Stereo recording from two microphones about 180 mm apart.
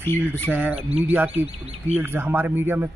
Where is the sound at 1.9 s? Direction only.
10° right (ahead or behind).